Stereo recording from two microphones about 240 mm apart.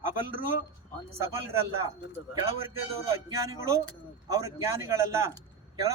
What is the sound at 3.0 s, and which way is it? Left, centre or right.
Speech, centre.